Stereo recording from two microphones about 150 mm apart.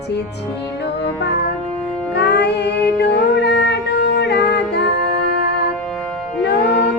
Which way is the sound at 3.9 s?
90° left.